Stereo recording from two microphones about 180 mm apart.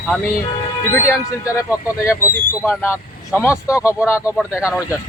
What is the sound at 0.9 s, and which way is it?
Speech, 15° left (ahead or behind).